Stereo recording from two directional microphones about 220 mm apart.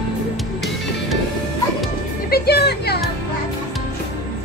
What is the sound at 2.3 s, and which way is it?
Speech, 45° left (ahead or behind).